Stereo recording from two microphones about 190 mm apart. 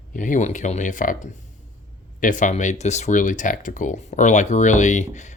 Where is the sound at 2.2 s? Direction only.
40° left (ahead or behind).